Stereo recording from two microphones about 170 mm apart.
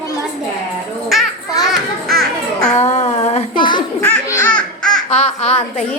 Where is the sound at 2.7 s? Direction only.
40° left (ahead or behind).